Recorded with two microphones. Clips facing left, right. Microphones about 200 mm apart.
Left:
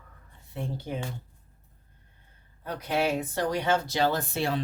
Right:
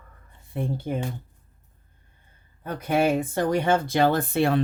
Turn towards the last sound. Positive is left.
turn(degrees=-55)  # may be behind; listen again after turning